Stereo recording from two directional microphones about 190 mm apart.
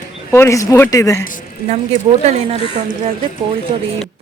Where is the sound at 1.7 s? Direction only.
35° right (ahead or behind).